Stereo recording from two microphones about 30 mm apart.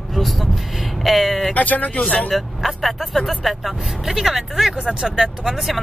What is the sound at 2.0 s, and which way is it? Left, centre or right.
Speech, left.